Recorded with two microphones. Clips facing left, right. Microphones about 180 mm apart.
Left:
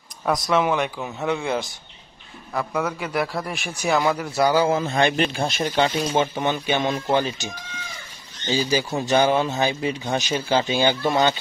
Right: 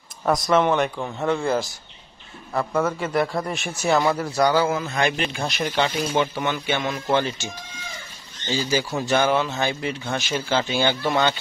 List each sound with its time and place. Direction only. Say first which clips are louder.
0.2 s a man's voice: right 2 dB; centre (ahead or behind)
4.6 s speech: left 3 dB; 25° left (ahead or behind)
8.5 s speech: left 1 dB; 15° left (ahead or behind)